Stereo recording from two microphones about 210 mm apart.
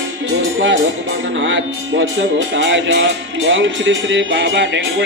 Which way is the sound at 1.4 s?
60° right (ahead or behind).